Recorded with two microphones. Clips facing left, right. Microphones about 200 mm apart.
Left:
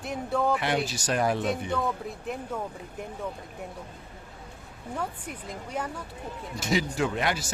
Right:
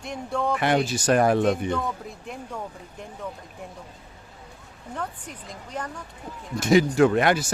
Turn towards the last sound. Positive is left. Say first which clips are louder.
# right 9 dB
turn(degrees=-55)  # may be behind; listen again after turning